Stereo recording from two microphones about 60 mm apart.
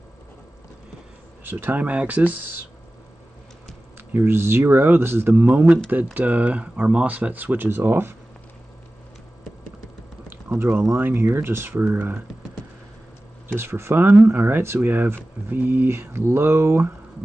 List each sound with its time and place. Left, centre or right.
1.4 s speech: right
1.9 s speech: right
4.1 s speech: right
10.5 s speech: right
13.6 s speech: right